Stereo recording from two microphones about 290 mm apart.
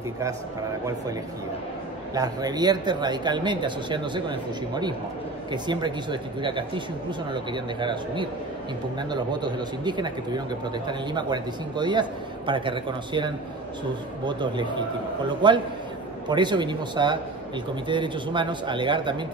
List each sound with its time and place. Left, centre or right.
2.1 s a man's voice: centre